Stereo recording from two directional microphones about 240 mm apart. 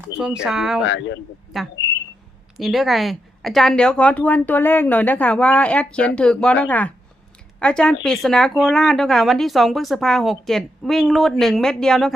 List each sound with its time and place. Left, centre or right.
0.2 s speech: centre
0.9 s speech: left
1.5 s speech: centre